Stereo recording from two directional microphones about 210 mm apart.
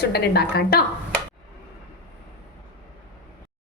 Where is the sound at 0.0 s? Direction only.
50° left (ahead or behind).